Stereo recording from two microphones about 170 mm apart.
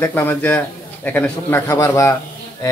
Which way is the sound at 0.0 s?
10° left (ahead or behind).